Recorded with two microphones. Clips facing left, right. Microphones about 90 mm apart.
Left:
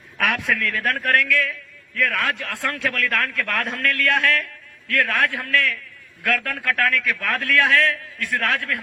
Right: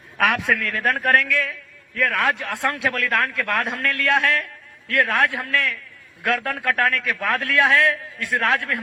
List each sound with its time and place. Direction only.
0.2 s a man's voice: 10° right (ahead or behind)